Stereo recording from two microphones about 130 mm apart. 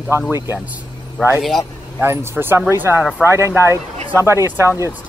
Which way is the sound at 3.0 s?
5° right (ahead or behind).